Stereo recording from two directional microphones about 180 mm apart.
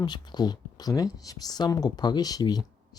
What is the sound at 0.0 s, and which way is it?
Speech, 25° left (ahead or behind).